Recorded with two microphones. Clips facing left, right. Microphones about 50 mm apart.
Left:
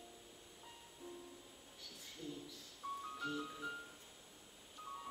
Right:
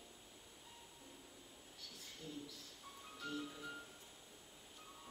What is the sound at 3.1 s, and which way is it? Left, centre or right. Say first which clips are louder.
Music: left 3 dB; centre.